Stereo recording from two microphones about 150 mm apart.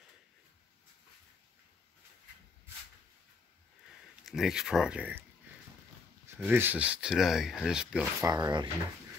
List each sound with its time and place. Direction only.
4.2 s speech: 5° right (ahead or behind)
6.2 s speech: 15° right (ahead or behind)
8.2 s speech: 25° right (ahead or behind)